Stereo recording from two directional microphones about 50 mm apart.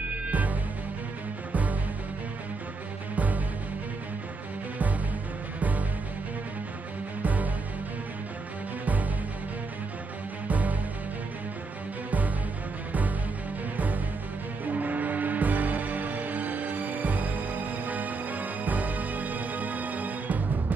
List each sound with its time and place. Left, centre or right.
0.0 s music: right
3.2 s music: right
5.6 s music: right
7.2 s music: right
8.8 s music: right
10.5 s music: right
13.7 s music: right